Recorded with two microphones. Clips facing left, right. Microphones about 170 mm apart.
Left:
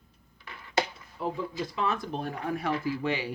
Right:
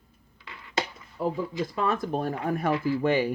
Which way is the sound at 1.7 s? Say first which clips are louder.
Right 4 dB; 45° right (ahead or behind).